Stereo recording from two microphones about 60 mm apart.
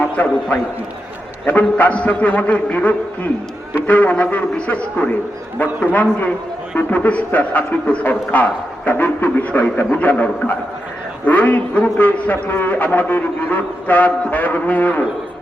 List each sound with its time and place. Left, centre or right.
0.2 s a man's voice: left
1.5 s a man's voice: left